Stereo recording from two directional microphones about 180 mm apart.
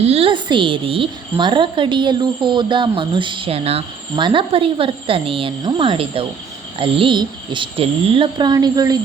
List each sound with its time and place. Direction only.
0.0 s a woman's voice: 35° right (ahead or behind)